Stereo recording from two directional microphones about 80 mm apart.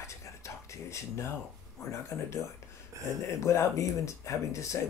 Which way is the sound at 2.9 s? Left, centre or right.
Right.